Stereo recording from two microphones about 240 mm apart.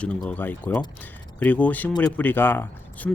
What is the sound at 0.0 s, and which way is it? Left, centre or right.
Speech, centre.